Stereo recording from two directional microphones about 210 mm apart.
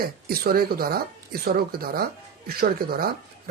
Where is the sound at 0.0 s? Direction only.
45° right (ahead or behind).